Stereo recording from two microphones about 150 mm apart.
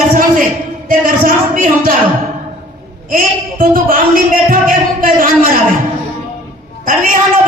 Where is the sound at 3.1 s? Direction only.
65° right (ahead or behind).